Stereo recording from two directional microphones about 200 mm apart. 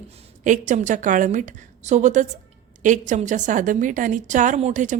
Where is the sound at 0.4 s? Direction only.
40° right (ahead or behind).